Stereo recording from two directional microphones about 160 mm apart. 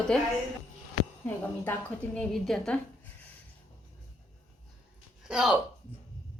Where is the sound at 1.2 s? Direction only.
10° left (ahead or behind).